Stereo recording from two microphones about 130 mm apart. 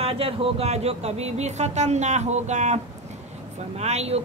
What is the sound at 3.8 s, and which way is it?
Speech, 55° right (ahead or behind).